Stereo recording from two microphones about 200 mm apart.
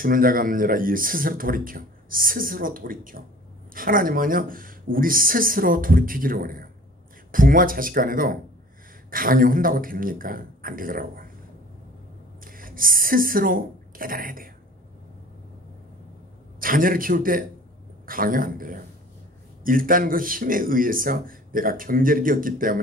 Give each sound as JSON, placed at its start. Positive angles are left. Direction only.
{"t": 0.0, "sound": "speech", "side_deg": -45}
{"t": 12.4, "sound": "speech", "side_deg": -45}
{"t": 16.5, "sound": "speech", "side_deg": -45}